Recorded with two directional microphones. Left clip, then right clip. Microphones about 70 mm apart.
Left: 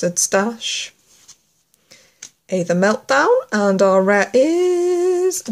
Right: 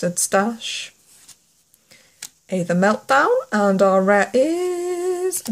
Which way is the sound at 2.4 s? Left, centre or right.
Centre.